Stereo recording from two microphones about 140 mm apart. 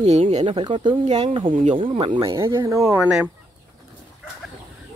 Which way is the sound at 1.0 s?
50° right (ahead or behind).